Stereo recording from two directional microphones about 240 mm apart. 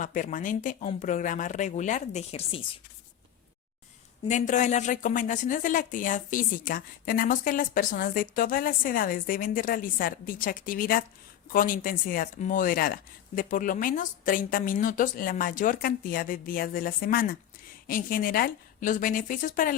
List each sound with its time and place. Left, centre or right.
0.0 s a woman's voice: left
4.3 s a woman's voice: left